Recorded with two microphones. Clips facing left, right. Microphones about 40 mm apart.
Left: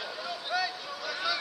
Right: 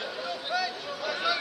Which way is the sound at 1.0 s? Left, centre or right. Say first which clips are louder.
Right 4 dB; right.